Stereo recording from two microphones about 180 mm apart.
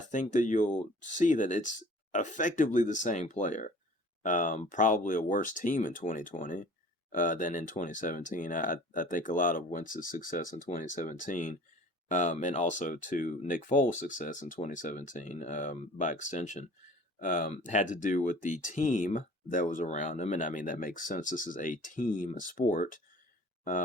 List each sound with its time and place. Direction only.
0.1 s speech: 45° left (ahead or behind)